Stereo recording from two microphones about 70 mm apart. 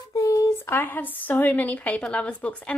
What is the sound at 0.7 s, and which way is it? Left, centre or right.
A woman's voice, left.